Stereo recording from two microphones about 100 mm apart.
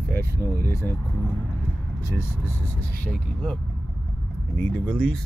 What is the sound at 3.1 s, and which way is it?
Speech, 5° left (ahead or behind).